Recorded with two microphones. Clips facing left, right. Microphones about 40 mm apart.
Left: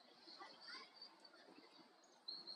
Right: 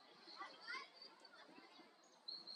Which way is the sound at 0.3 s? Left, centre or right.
Right.